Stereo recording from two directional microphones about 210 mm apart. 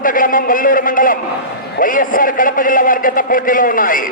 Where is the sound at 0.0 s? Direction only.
40° left (ahead or behind).